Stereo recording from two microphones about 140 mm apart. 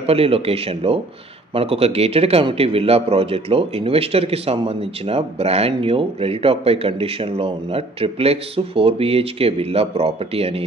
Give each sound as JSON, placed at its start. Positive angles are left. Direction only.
{"t": 0.0, "sound": "a man's voice", "side_deg": -45}